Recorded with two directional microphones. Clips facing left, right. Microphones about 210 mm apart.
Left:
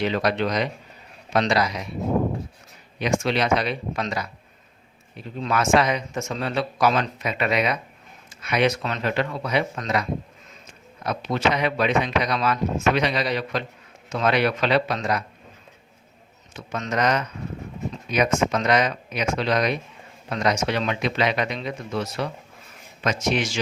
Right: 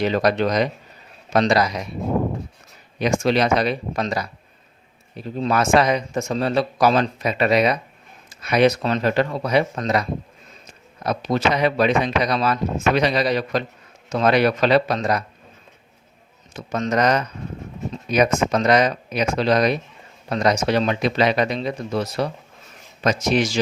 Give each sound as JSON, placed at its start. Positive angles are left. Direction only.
{"t": 0.0, "sound": "speech", "side_deg": -40}
{"t": 3.0, "sound": "speech", "side_deg": -40}
{"t": 16.6, "sound": "speech", "side_deg": -35}